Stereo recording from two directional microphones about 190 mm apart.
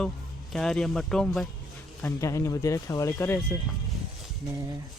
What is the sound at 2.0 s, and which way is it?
Speech, 15° left (ahead or behind).